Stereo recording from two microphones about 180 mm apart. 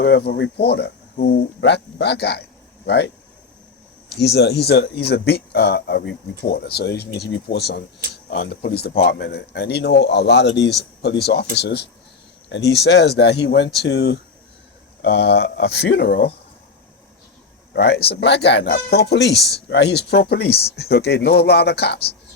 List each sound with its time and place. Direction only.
0.0 s speech: 65° left (ahead or behind)
4.1 s speech: 65° left (ahead or behind)
17.7 s speech: 65° left (ahead or behind)